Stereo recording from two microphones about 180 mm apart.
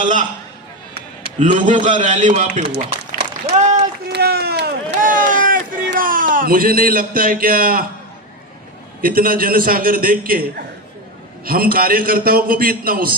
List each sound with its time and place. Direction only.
0.0 s a man's voice: 45° right (ahead or behind)
1.5 s a man's voice: 45° right (ahead or behind)
3.4 s run: 40° right (ahead or behind)
4.1 s run: 60° right (ahead or behind)
4.9 s a sound: 50° right (ahead or behind)
6.0 s a man's voice: 50° right (ahead or behind)
9.0 s a man's voice: 55° right (ahead or behind)
11.4 s a man's voice: 55° right (ahead or behind)